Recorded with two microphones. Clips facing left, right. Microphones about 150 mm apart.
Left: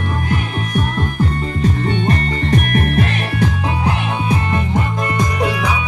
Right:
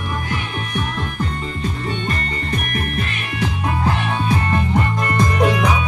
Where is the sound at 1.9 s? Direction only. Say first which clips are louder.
Left 6 dB; 65° left (ahead or behind).